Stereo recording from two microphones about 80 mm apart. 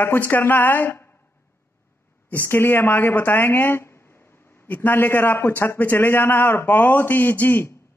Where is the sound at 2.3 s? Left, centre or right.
Left.